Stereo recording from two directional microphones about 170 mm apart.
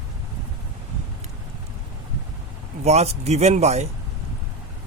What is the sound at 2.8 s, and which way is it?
Speech, 40° right (ahead or behind).